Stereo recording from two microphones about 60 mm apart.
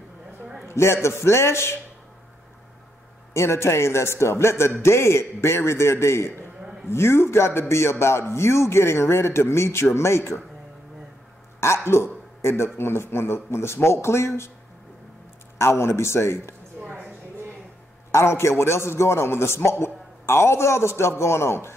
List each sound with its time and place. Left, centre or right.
0.7 s a man's voice: left
3.3 s a man's voice: left
11.6 s a man's voice: left
15.5 s a man's voice: left
16.8 s a sound: right
18.1 s a man's voice: left